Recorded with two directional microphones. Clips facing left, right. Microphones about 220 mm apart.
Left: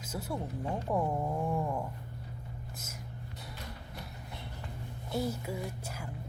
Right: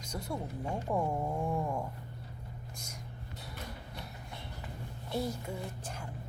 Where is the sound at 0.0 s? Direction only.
5° left (ahead or behind).